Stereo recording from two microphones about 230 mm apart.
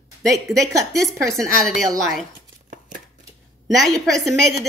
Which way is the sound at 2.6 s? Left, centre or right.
Right.